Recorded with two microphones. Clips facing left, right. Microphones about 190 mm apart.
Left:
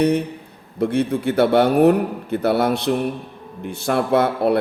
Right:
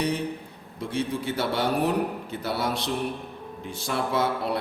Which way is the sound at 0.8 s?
60° left (ahead or behind).